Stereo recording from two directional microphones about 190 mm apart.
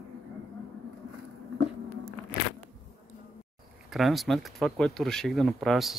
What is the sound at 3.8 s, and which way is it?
Speech, centre (ahead or behind).